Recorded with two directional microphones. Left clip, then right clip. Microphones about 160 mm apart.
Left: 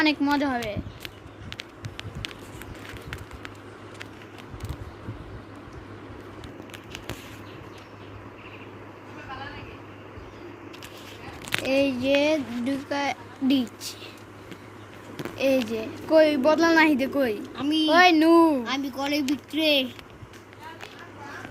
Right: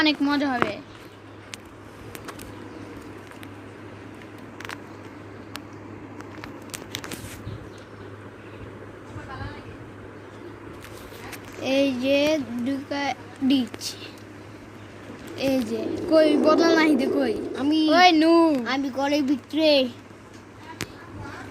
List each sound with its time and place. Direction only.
0.0 s speech: 15° left (ahead or behind)
11.6 s speech: 5° left (ahead or behind)
15.4 s speech: 10° left (ahead or behind)
17.6 s a woman's voice: 45° right (ahead or behind)
17.9 s speech: 10° left (ahead or behind)
18.8 s speech: 40° right (ahead or behind)